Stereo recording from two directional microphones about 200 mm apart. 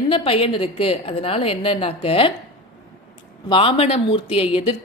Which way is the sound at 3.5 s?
25° left (ahead or behind).